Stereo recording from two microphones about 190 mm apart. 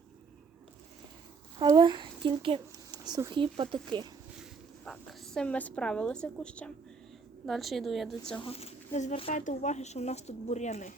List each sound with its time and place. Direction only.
1.5 s speech: 20° right (ahead or behind)
4.9 s a woman's voice: 5° left (ahead or behind)
8.4 s speech: 30° left (ahead or behind)